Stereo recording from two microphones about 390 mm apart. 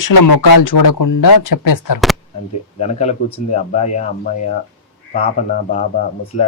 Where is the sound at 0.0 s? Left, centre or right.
Left.